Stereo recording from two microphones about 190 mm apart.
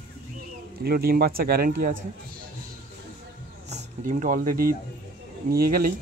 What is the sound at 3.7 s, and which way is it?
Speech, 40° right (ahead or behind).